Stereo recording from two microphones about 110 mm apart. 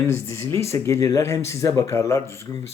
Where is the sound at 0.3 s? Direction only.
25° left (ahead or behind).